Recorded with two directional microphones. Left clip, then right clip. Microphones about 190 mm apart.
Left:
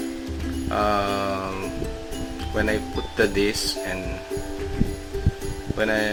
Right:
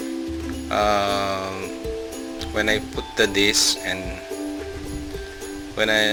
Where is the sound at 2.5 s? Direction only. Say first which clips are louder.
Right 2 dB; 15° right (ahead or behind).